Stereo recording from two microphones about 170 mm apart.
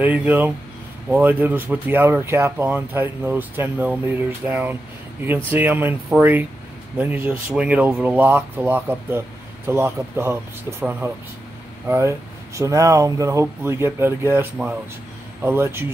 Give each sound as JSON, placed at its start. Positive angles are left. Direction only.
{"t": 0.0, "sound": "speech", "side_deg": -10}